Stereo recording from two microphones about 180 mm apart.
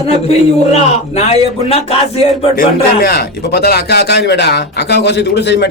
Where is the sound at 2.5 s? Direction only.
55° left (ahead or behind).